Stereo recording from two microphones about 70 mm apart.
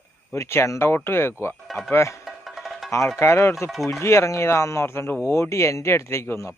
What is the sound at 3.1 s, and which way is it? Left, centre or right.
Speech, left.